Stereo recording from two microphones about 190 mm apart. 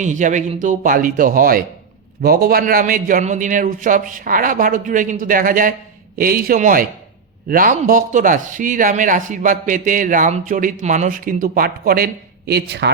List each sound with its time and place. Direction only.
0.0 s speech: 40° right (ahead or behind); by 12.9 s 60° right (ahead or behind)